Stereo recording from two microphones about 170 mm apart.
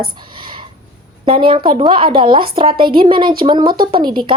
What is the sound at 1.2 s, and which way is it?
A woman's voice, 30° right (ahead or behind).